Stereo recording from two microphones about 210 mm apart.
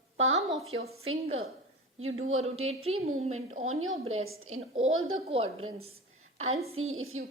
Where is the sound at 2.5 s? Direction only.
30° right (ahead or behind).